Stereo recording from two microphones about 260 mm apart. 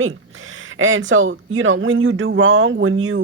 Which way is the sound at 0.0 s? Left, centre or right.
Right.